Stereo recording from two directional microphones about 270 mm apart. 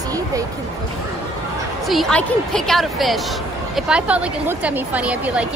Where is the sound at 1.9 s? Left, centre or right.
Centre.